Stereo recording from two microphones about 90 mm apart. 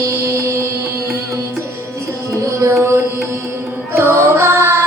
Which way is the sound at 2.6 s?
30° right (ahead or behind).